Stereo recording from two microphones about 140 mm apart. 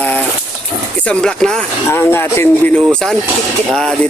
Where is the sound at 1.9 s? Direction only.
15° left (ahead or behind).